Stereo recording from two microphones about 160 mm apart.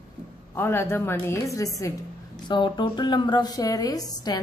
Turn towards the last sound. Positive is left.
turn(degrees=20)  # may be behind; listen again after turning